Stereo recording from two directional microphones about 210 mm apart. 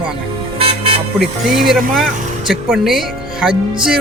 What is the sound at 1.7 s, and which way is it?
Speech, centre (ahead or behind).